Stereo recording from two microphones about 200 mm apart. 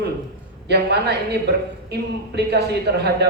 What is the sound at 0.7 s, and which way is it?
A man's voice, 55° right (ahead or behind).